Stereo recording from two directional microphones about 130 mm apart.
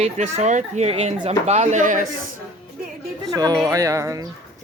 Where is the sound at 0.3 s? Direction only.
60° right (ahead or behind); by 2.0 s 80° right.